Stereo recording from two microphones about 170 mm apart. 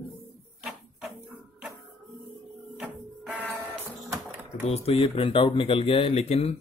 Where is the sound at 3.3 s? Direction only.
Centre (ahead or behind).